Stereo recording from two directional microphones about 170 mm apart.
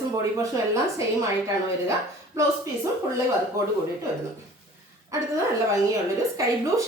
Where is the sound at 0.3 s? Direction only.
20° right (ahead or behind).